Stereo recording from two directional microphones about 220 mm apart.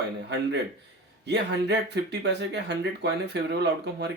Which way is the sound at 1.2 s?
50° right (ahead or behind).